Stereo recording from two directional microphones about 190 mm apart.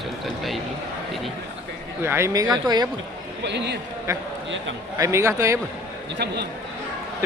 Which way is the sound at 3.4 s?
65° right (ahead or behind).